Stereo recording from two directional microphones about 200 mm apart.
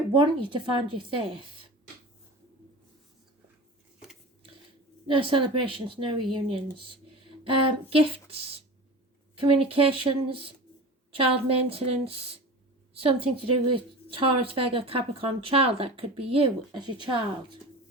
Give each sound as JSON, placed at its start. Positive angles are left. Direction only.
{"t": 0.1, "sound": "a woman's voice", "side_deg": -25}
{"t": 5.0, "sound": "a woman's voice", "side_deg": -25}
{"t": 9.3, "sound": "a woman's voice", "side_deg": -25}